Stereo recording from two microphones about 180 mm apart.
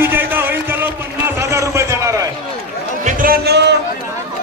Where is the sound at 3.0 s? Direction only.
55° right (ahead or behind).